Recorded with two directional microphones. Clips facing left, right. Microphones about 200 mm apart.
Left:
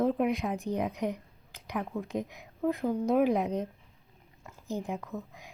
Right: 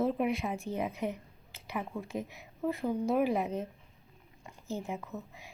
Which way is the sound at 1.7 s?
5° right (ahead or behind).